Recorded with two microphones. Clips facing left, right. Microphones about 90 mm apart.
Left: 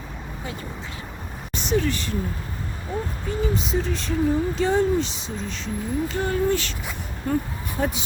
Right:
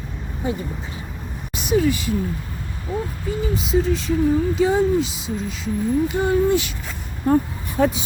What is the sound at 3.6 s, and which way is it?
Speech, 5° right (ahead or behind).